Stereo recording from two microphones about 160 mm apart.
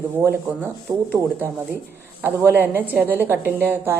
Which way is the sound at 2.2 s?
10° right (ahead or behind).